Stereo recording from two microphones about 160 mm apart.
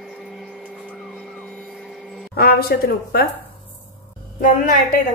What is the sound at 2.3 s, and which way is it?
Speech, 70° left (ahead or behind).